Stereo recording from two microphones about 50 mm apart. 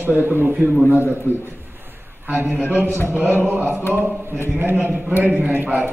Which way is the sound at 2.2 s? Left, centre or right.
Right.